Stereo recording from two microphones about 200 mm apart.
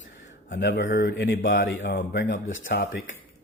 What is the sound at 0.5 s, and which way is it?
A man's voice, 60° left (ahead or behind).